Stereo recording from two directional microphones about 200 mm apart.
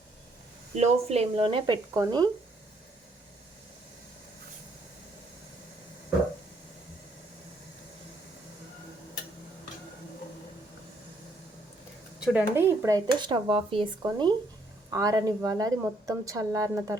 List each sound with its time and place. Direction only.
0.8 s speech: 30° right (ahead or behind)
12.2 s a woman's voice: 10° right (ahead or behind)